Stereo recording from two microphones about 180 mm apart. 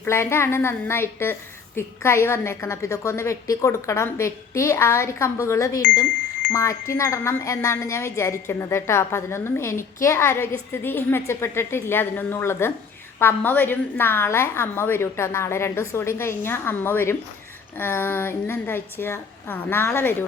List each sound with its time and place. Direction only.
0.0 s a woman's voice: 15° left (ahead or behind)